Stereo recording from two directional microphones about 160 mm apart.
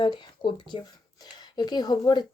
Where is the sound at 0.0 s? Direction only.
30° left (ahead or behind).